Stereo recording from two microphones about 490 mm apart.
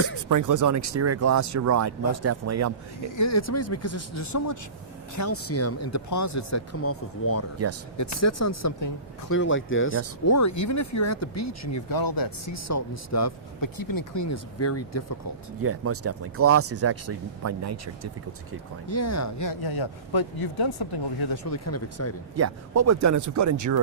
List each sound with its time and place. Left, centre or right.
0.2 s speech: right
3.2 s speech: left
10.2 s speech: left
12.6 s speech: left
15.6 s speech: right
18.9 s speech: left
21.5 s speech: left
22.4 s speech: right